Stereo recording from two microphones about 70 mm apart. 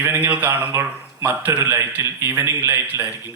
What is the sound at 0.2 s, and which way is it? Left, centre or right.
Speech, right.